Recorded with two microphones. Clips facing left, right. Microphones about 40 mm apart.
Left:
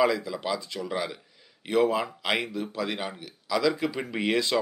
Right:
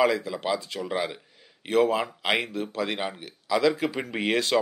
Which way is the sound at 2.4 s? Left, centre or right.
Right.